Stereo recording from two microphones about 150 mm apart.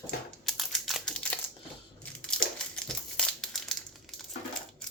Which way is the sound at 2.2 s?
5° left (ahead or behind).